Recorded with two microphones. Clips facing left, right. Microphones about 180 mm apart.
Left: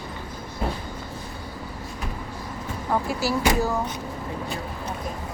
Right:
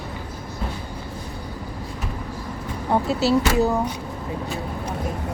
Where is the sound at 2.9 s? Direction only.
20° right (ahead or behind).